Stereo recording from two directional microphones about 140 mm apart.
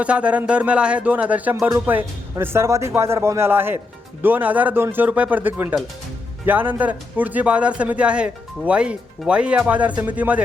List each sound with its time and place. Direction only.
0.0 s speech: 10° right (ahead or behind)